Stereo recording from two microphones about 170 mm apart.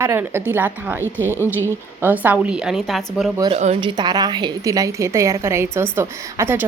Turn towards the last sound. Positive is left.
turn(degrees=-15)  # may be behind; listen again after turning